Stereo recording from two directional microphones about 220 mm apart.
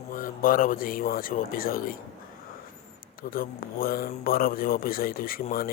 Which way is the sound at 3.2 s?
40° left (ahead or behind).